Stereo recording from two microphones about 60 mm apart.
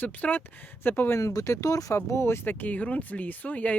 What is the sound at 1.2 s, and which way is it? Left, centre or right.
Speech, left.